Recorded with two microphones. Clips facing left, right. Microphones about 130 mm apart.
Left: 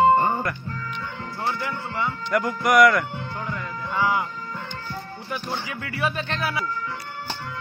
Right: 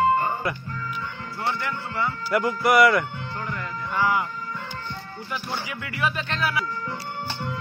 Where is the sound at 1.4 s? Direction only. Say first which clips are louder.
Even; 20° left (ahead or behind).